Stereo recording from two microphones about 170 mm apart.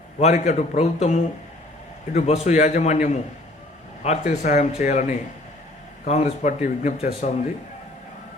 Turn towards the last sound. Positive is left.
turn(degrees=45)  # may be behind; listen again after turning